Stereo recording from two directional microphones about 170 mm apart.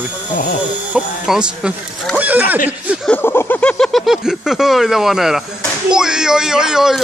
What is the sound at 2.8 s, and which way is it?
Speech, 5° right (ahead or behind).